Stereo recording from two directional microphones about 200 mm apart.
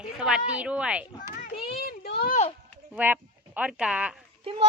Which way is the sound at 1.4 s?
45° left (ahead or behind).